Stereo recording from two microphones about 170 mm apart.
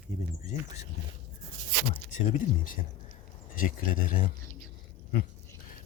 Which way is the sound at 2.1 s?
45° left (ahead or behind).